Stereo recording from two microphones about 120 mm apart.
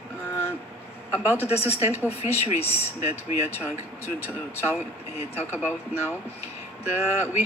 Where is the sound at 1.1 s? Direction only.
20° right (ahead or behind).